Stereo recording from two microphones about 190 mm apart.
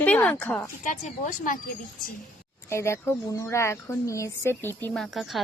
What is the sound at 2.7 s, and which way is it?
A woman's voice, 15° left (ahead or behind).